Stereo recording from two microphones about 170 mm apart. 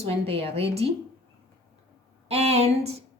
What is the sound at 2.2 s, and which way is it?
Speech, 40° right (ahead or behind).